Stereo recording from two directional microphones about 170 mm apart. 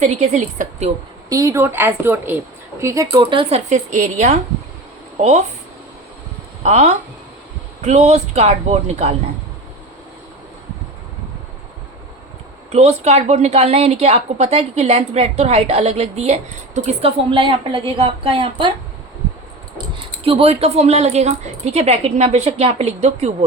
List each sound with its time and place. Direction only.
0.0 s a woman's voice: 45° right (ahead or behind)
1.3 s a woman's voice: 20° right (ahead or behind)
3.1 s a woman's voice: 30° right (ahead or behind)
3.7 s a woman's voice: 45° right (ahead or behind)
6.6 s a woman's voice: 40° right (ahead or behind)
12.7 s a woman's voice: 40° right (ahead or behind)
20.2 s a woman's voice: 35° right (ahead or behind)